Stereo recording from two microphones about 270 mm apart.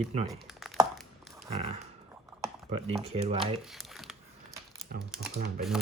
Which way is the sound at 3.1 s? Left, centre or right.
Right.